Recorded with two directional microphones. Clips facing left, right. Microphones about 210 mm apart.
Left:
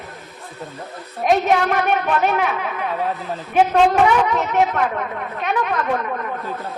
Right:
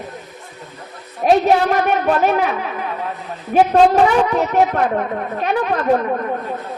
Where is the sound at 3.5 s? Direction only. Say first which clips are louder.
Right 3 dB; 35° right (ahead or behind).